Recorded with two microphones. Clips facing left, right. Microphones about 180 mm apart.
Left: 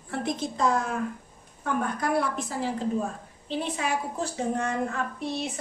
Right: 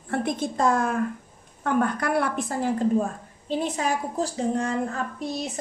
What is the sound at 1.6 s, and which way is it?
A woman's voice, 65° right (ahead or behind).